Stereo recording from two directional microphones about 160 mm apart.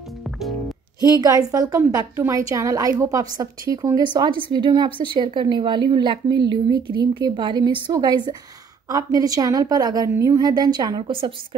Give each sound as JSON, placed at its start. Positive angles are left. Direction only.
{"t": 0.4, "sound": "music", "side_deg": 0}
{"t": 1.2, "sound": "a woman's voice", "side_deg": -20}